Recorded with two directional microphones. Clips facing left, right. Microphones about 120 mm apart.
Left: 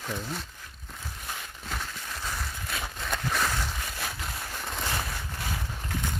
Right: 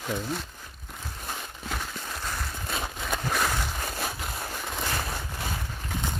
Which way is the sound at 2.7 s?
30° right (ahead or behind).